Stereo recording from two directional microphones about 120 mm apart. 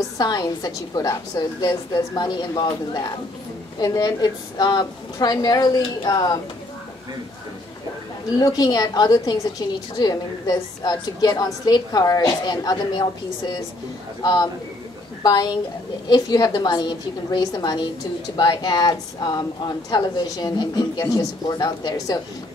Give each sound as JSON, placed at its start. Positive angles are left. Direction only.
{"t": 0.2, "sound": "a woman's voice", "side_deg": 35}
{"t": 8.4, "sound": "a woman's voice", "side_deg": 35}